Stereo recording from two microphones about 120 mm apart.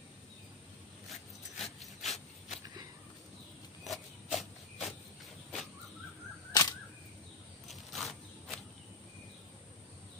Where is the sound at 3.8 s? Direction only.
Centre (ahead or behind).